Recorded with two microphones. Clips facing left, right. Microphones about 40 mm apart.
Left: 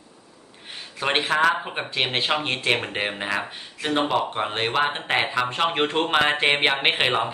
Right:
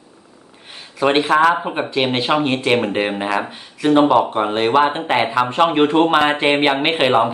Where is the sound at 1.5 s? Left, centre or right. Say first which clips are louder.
Right 6 dB; centre.